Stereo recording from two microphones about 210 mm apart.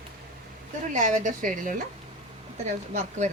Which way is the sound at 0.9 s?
35° right (ahead or behind).